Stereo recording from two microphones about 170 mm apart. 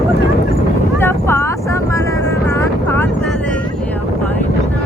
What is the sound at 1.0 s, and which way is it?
Vehicle, 15° left (ahead or behind).